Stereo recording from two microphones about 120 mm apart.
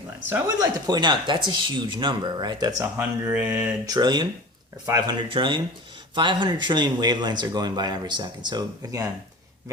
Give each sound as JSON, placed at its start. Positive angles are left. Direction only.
{"t": 0.6, "sound": "speech", "side_deg": -35}
{"t": 2.8, "sound": "speech", "side_deg": -15}
{"t": 3.8, "sound": "speech", "side_deg": -35}
{"t": 5.3, "sound": "speech", "side_deg": -40}